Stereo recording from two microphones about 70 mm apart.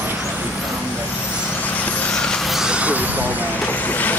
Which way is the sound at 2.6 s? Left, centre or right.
Centre.